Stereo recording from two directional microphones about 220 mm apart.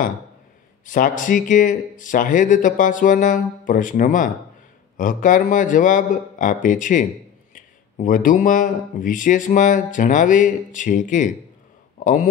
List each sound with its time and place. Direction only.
0.8 s speech: 35° left (ahead or behind)